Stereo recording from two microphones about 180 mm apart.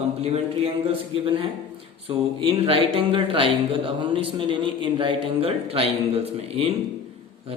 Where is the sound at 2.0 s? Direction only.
30° right (ahead or behind).